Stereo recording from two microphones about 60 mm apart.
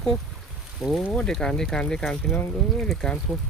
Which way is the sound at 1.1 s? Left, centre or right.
Centre.